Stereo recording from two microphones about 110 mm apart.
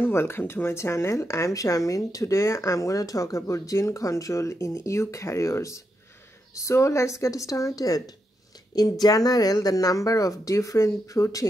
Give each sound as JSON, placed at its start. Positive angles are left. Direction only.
{"t": 0.0, "sound": "speech", "side_deg": 20}